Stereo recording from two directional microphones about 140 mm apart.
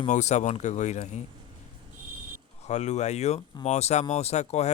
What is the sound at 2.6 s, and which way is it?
Speech, 55° left (ahead or behind).